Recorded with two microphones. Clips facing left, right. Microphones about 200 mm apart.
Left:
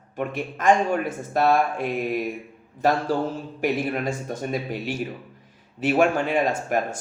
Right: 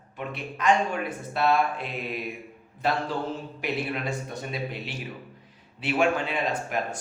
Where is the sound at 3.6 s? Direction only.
45° left (ahead or behind).